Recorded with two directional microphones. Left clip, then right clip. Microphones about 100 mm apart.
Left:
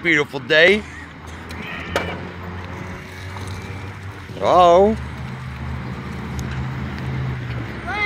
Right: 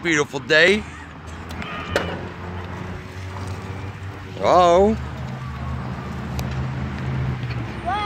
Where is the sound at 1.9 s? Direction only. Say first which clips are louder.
Even; 55° left (ahead or behind).